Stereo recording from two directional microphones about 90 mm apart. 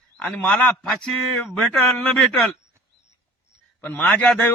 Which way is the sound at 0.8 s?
5° left (ahead or behind).